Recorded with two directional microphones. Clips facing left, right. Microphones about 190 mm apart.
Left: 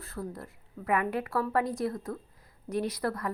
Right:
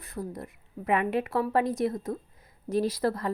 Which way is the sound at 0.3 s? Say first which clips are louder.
Right 4 dB; 20° right (ahead or behind).